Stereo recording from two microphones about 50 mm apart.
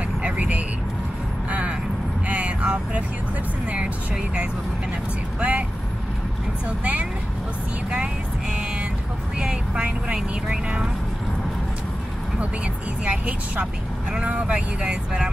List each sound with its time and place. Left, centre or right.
0.2 s vehicle: right
5.4 s vehicle: right
6.8 s speech: right
9.4 s speech: centre
13.0 s speech: right